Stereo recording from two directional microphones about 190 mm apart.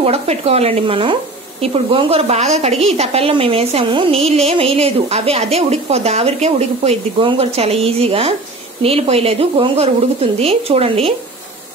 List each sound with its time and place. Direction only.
0.0 s speech: 35° right (ahead or behind)